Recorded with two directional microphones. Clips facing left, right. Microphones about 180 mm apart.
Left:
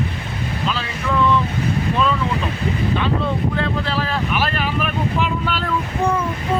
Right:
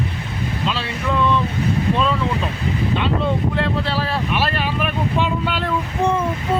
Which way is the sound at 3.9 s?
30° right (ahead or behind).